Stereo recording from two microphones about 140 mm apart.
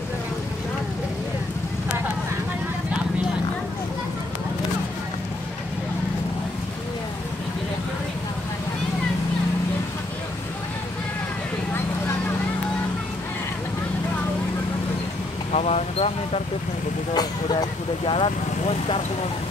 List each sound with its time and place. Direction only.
15.5 s a sound: 50° left (ahead or behind)
17.1 s speech: 30° left (ahead or behind)
18.1 s speech: 40° left (ahead or behind)